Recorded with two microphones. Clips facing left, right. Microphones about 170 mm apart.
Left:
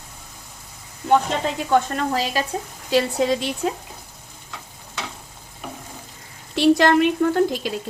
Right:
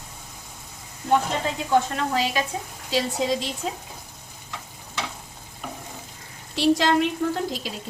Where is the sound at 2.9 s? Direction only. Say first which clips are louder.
Left 5 dB; 60° left (ahead or behind).